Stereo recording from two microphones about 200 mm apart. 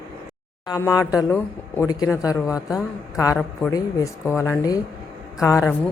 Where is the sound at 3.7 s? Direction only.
15° left (ahead or behind).